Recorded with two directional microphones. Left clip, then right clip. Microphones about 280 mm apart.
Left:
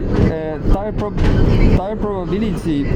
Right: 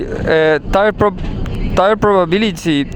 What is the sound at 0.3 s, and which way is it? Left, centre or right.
Speech, right.